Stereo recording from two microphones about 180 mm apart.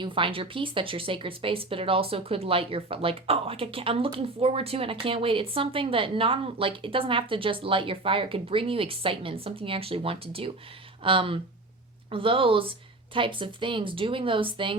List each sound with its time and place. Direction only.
0.0 s speech: 30° right (ahead or behind)